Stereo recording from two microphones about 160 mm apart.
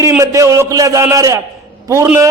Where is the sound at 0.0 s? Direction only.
20° right (ahead or behind).